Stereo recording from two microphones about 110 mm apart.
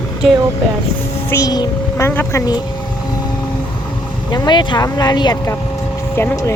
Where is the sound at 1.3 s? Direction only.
35° left (ahead or behind).